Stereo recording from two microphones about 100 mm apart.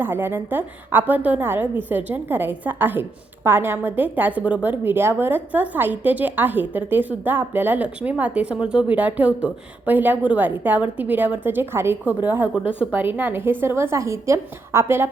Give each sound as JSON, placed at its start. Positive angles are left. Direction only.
{"t": 0.0, "sound": "a woman's voice", "side_deg": -20}